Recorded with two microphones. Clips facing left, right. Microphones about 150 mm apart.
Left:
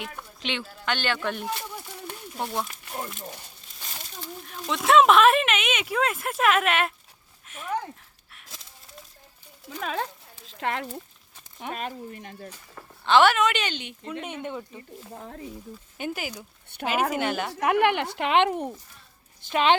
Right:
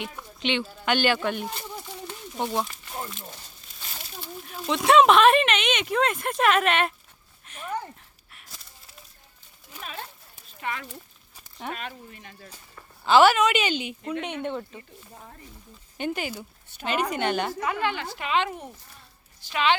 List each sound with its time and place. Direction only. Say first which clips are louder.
0.0 s speech: right 4 dB; centre (ahead or behind)
0.9 s speech: right 4 dB; 10° right (ahead or behind)
4.2 s speech: right 1 dB; 5° right (ahead or behind)
7.4 s a sound: right 1 dB; centre (ahead or behind)
9.6 s a sound: left 9 dB; 90° left; by 10.8 s 70° left (ahead or behind)
11.7 s speech: left 5 dB; 40° left (ahead or behind)
13.1 s speech: right 2 dB; 5° right (ahead or behind)
15.1 s a woman's voice: left 8 dB; 65° left (ahead or behind)
16.0 s speech: right 3 dB; 5° left (ahead or behind)
17.5 s a woman's voice: left 6 dB; 70° left (ahead or behind); by 19.7 s 50° left (ahead or behind)